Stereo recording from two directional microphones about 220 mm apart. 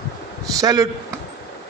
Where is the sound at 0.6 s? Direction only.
15° right (ahead or behind).